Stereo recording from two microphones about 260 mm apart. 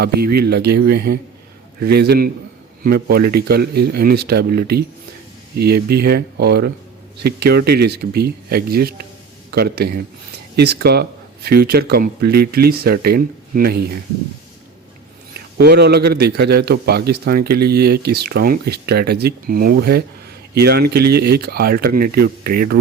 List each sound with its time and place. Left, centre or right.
0.0 s a man's voice: right
15.5 s a man's voice: right